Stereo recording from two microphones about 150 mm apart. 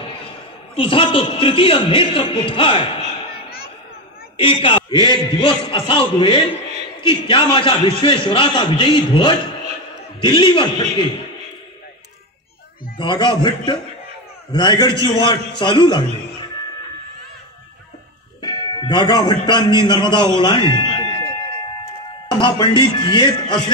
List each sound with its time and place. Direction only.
0.7 s a man's voice: 35° left (ahead or behind)
12.9 s a man's voice: 30° left (ahead or behind)
18.4 s a man's voice: 30° left (ahead or behind)
20.3 s a sound: 30° left (ahead or behind)
22.4 s a man's voice: 30° left (ahead or behind)